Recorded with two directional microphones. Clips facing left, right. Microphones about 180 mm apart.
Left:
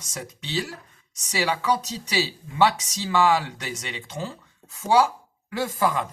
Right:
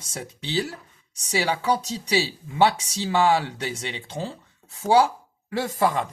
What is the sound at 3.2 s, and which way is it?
Speech, 30° right (ahead or behind).